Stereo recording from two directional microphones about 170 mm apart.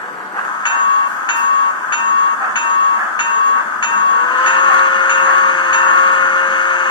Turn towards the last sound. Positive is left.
turn(degrees=25)  # may be behind; listen again after turning